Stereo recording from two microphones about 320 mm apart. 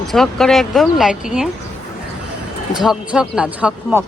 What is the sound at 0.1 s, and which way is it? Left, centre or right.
Speech, centre.